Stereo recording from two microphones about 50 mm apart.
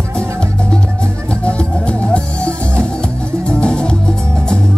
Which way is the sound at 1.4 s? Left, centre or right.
Left.